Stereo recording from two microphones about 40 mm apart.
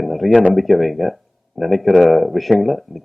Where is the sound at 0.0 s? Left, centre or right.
Centre.